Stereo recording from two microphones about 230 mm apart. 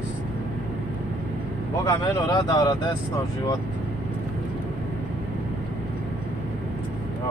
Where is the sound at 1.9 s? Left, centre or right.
Centre.